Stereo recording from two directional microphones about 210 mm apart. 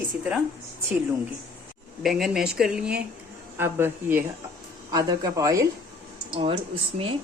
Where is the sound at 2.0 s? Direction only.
Centre (ahead or behind).